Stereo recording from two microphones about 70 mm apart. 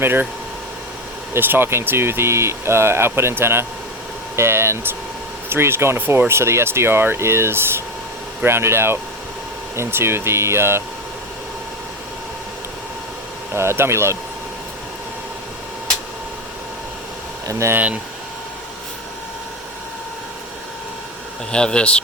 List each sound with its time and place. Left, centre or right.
0.0 s speech: right
1.3 s speech: right
13.5 s speech: right
17.5 s speech: right
21.5 s speech: centre